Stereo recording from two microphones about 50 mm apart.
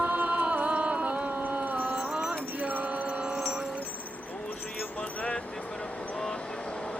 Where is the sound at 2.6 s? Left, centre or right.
Right.